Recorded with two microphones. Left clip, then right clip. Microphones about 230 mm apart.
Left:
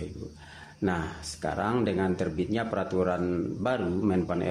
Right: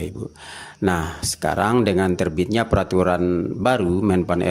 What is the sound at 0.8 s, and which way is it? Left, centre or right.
Speech, right.